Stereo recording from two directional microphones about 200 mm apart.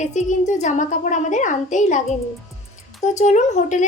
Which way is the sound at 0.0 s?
35° left (ahead or behind).